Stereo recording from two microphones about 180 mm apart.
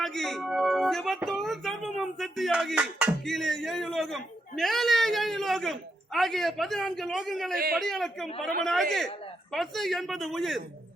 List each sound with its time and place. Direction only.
0.0 s speech: centre (ahead or behind)
7.5 s a man's voice: 55° right (ahead or behind)
7.8 s speech: centre (ahead or behind)